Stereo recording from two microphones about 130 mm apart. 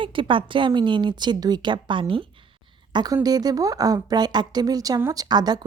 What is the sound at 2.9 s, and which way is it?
A woman's voice, 30° right (ahead or behind).